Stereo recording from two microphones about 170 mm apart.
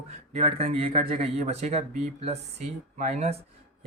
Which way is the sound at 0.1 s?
35° right (ahead or behind).